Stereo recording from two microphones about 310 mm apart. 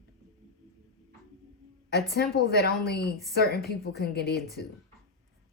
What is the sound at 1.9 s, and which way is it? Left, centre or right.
A woman's voice, left.